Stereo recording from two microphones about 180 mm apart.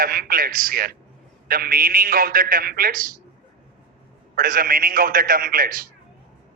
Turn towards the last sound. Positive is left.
turn(degrees=-50)  # may be behind; listen again after turning